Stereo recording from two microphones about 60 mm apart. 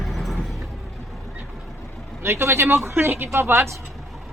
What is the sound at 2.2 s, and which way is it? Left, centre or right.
A woman's voice, right.